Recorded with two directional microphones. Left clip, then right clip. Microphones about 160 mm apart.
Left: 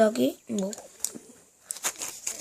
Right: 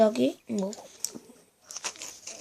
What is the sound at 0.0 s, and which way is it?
Speech, 5° left (ahead or behind).